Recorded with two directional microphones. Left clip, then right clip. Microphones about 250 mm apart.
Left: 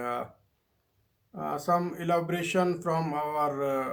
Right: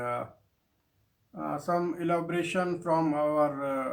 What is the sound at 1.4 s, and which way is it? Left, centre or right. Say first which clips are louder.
Speech: left 2 dB; left.